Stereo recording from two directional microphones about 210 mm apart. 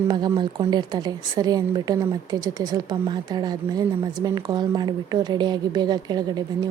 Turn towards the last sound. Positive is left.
turn(degrees=-20)  # may be behind; listen again after turning